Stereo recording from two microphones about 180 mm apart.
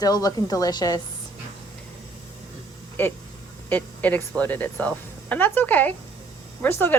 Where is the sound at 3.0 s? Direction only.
10° left (ahead or behind).